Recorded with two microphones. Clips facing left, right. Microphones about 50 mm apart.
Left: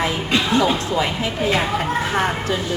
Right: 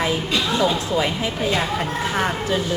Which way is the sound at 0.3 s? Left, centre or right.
Left.